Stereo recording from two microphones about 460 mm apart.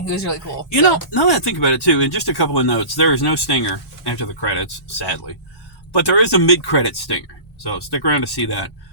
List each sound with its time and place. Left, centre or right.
0.7 s speech: left